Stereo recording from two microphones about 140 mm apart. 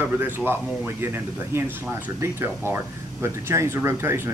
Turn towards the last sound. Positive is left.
turn(degrees=-15)  # may be behind; listen again after turning